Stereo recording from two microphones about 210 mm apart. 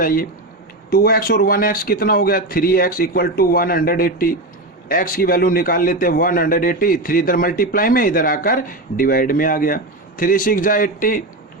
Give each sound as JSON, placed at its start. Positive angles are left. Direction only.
{"t": 0.0, "sound": "a man's voice", "side_deg": 45}